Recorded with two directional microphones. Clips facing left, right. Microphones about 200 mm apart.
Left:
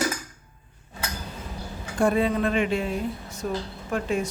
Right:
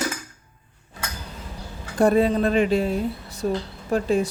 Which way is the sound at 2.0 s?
35° right (ahead or behind).